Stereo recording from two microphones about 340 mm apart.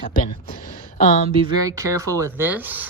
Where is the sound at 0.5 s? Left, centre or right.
Left.